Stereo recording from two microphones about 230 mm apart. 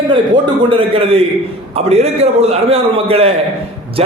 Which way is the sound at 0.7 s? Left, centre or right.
Right.